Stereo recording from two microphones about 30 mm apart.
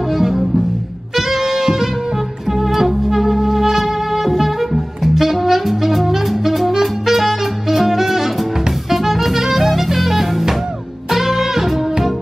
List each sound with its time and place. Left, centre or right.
0.1 s music: centre